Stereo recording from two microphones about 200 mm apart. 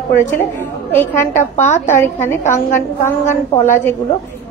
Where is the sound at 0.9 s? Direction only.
10° left (ahead or behind).